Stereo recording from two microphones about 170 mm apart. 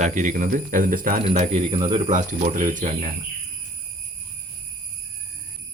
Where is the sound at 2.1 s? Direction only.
50° right (ahead or behind).